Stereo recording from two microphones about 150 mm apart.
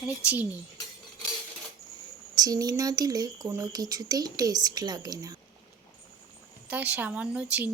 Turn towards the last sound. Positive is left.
turn(degrees=-10)  # may be behind; listen again after turning